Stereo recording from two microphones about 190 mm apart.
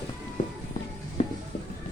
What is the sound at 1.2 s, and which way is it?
Music, 30° left (ahead or behind).